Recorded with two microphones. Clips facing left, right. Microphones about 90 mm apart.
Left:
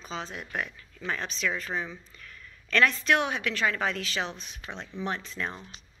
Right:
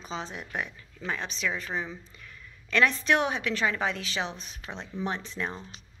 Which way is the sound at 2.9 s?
30° right (ahead or behind).